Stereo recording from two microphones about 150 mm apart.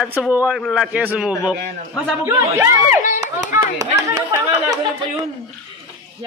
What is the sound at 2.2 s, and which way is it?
Speech, 20° right (ahead or behind).